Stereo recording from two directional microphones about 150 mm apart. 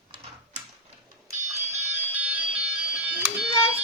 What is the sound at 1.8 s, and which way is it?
Music, 15° right (ahead or behind).